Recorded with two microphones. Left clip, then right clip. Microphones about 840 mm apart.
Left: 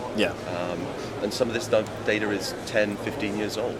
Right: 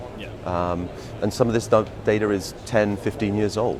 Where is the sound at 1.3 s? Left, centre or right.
Right.